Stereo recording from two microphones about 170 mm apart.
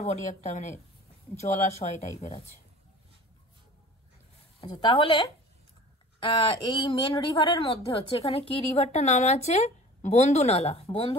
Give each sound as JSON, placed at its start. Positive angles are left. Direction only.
{"t": 0.0, "sound": "a woman's voice", "side_deg": 45}
{"t": 4.6, "sound": "a woman's voice", "side_deg": 25}